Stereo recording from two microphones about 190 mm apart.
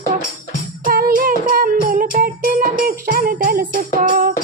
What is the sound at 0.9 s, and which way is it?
Music, 50° right (ahead or behind).